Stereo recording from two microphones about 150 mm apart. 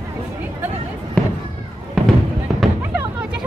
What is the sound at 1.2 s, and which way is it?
Fireworks, 5° left (ahead or behind).